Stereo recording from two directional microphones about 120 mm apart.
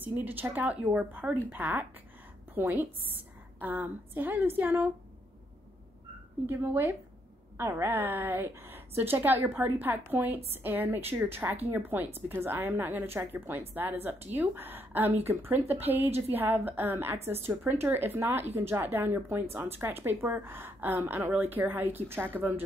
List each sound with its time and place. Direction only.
0.0 s a woman's voice: 15° right (ahead or behind)
6.4 s a woman's voice: 15° right (ahead or behind)